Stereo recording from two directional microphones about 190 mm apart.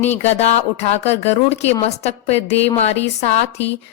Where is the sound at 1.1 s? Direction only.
35° left (ahead or behind).